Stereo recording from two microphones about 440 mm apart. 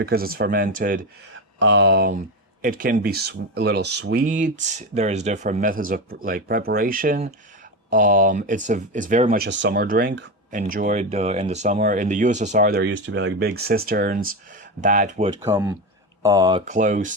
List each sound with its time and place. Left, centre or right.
0.0 s speech: right